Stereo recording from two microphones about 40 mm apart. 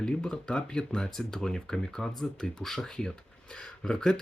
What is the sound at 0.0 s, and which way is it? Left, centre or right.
Speech, centre.